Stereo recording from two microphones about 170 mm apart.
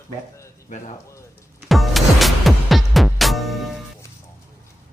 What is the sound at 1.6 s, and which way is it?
Music, centre (ahead or behind).